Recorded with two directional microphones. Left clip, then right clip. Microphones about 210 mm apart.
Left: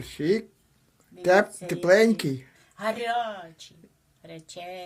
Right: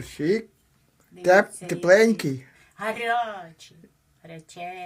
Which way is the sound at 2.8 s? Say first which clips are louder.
Right 2 dB; 15° left (ahead or behind).